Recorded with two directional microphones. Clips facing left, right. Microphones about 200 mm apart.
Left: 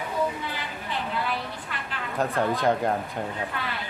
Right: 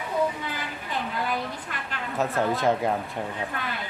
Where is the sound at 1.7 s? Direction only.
45° right (ahead or behind).